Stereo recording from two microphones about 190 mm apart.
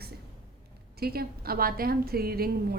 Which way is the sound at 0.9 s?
55° right (ahead or behind).